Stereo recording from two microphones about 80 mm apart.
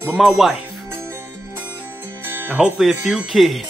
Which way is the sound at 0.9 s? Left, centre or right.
Right.